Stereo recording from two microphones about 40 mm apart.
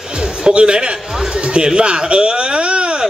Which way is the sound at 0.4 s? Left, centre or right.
Right.